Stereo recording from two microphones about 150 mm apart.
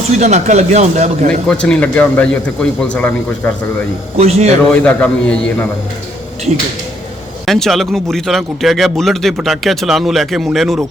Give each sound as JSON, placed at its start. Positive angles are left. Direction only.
{"t": 0.2, "sound": "speech", "side_deg": -50}
{"t": 1.5, "sound": "a man's voice", "side_deg": 5}
{"t": 4.2, "sound": "speech", "side_deg": -45}
{"t": 4.7, "sound": "a man's voice", "side_deg": 10}
{"t": 7.4, "sound": "speech", "side_deg": 0}